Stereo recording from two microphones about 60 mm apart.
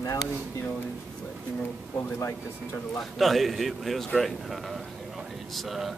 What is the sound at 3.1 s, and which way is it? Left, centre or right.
Speech, centre.